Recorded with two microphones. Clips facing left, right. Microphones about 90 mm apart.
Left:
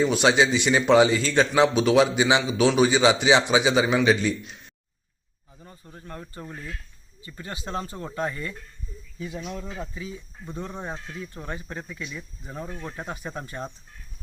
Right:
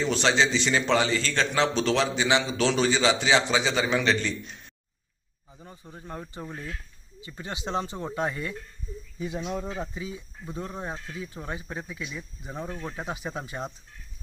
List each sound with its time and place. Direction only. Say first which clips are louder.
0.1 s a man's voice: left 3 dB; 15° left (ahead or behind)
5.5 s speech: right 1 dB; 15° right (ahead or behind)